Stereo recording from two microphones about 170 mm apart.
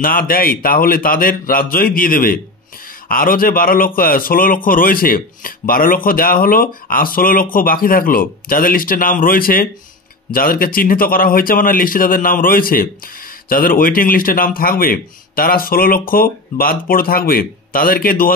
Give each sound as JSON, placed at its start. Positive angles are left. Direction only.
{"t": 0.0, "sound": "speech", "side_deg": 55}